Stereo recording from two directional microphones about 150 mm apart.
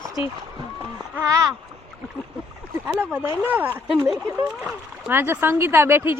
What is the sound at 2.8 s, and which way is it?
Speech, 10° right (ahead or behind).